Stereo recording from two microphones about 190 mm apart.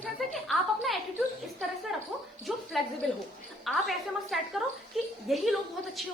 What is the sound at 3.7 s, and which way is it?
A woman's voice, centre (ahead or behind).